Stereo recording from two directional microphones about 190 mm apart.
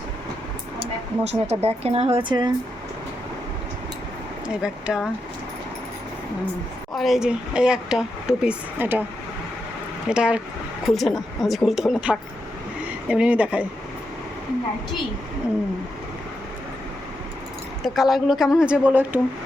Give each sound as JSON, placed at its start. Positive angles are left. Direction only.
{"t": 0.8, "sound": "speech", "side_deg": -35}
{"t": 4.4, "sound": "speech", "side_deg": -5}
{"t": 6.9, "sound": "speech", "side_deg": 0}
{"t": 10.1, "sound": "speech", "side_deg": -5}
{"t": 17.8, "sound": "speech", "side_deg": 0}